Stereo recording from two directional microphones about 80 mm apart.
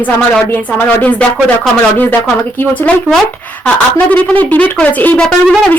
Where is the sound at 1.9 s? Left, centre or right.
Left.